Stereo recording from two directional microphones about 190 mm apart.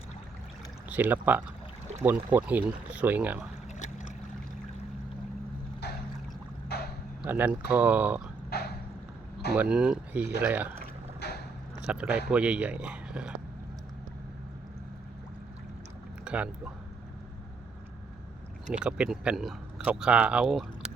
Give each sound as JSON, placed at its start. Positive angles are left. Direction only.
{"t": 0.9, "sound": "speech", "side_deg": -10}
{"t": 5.8, "sound": "boat", "side_deg": 60}
{"t": 6.7, "sound": "a sound", "side_deg": 60}
{"t": 7.2, "sound": "speech", "side_deg": -10}
{"t": 8.4, "sound": "a sound", "side_deg": 55}
{"t": 9.6, "sound": "speech", "side_deg": -5}
{"t": 10.8, "sound": "a sound", "side_deg": 55}
{"t": 11.8, "sound": "speech", "side_deg": -5}
{"t": 16.2, "sound": "speech", "side_deg": -5}
{"t": 18.7, "sound": "speech", "side_deg": -5}